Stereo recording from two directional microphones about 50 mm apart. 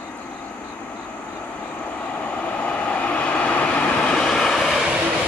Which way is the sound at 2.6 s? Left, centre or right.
Left.